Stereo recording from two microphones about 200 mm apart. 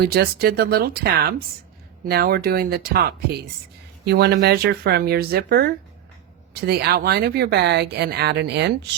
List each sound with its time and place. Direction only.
0.0 s speech: 50° right (ahead or behind)